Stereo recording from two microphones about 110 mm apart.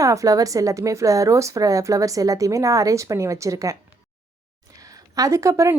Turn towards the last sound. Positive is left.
turn(degrees=-30)  # may be behind; listen again after turning